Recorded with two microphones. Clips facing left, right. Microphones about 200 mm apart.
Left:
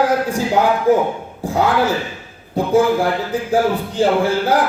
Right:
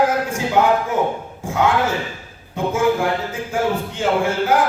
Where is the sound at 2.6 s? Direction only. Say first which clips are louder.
Left 4 dB; 35° left (ahead or behind).